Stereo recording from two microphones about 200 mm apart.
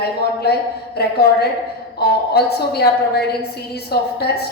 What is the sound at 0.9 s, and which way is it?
A woman's voice, 50° left (ahead or behind).